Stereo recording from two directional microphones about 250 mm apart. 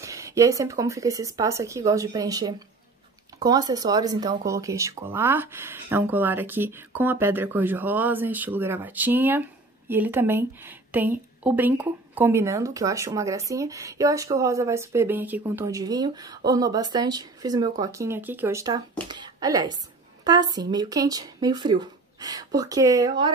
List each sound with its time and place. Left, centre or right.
0.0 s speech: centre